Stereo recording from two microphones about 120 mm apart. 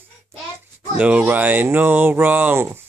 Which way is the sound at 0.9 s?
10° right (ahead or behind).